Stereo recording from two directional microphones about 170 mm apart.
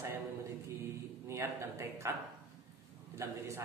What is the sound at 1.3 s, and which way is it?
Speech, 15° right (ahead or behind).